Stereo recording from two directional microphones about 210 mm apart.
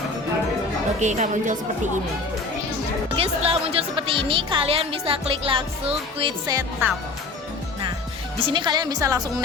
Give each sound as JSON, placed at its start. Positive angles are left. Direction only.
{"t": 0.9, "sound": "speech", "side_deg": -35}
{"t": 3.2, "sound": "speech", "side_deg": -25}
{"t": 8.4, "sound": "speech", "side_deg": -25}